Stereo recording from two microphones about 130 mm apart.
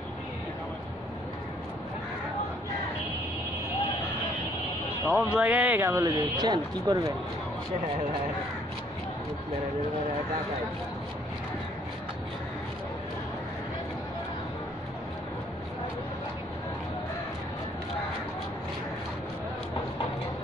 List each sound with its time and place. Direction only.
5.0 s speech: 10° right (ahead or behind)
6.3 s speech: 30° right (ahead or behind)